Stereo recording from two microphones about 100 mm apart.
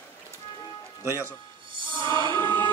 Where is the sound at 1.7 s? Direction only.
55° right (ahead or behind).